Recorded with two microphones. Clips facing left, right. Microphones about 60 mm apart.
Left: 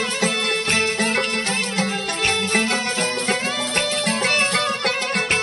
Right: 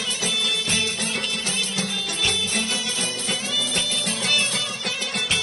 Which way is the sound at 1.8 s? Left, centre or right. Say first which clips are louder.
Left 4 dB; left.